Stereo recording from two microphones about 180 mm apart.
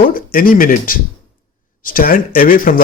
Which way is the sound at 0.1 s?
50° left (ahead or behind).